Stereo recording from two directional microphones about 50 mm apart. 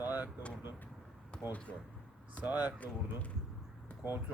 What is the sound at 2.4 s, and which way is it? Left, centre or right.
Speech, right.